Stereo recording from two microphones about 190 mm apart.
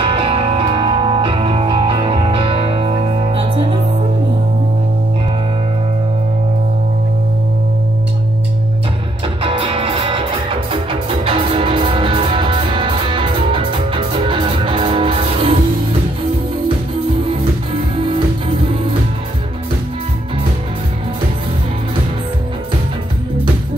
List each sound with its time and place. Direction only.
0.0 s music: 30° right (ahead or behind)
9.4 s music: 30° right (ahead or behind)
17.9 s music: 30° right (ahead or behind)